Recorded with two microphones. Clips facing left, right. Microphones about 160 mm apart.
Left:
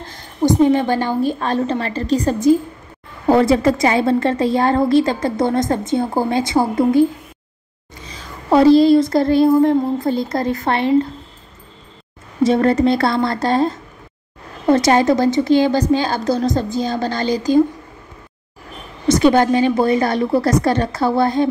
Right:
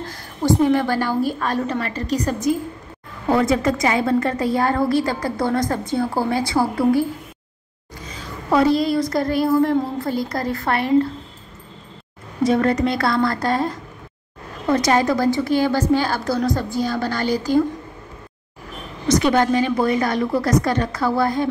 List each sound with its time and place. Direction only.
0.1 s a woman's voice: 20° left (ahead or behind)
8.5 s a woman's voice: 30° left (ahead or behind)
12.4 s a woman's voice: 30° left (ahead or behind)
19.0 s a woman's voice: 30° left (ahead or behind)